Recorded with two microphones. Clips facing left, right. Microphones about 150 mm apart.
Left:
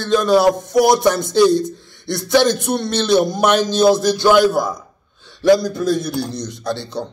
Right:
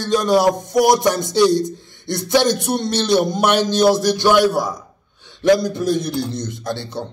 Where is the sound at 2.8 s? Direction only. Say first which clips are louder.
Left 2 dB; 15° right (ahead or behind).